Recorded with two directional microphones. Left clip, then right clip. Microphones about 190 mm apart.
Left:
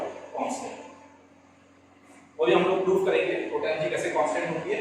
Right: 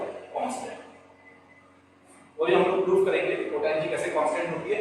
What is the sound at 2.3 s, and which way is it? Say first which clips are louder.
A man's voice: even; 5° left (ahead or behind).